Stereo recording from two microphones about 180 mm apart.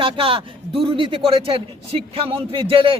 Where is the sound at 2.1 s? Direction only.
30° right (ahead or behind).